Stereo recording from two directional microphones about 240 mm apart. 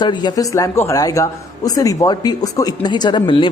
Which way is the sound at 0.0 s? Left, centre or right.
Centre.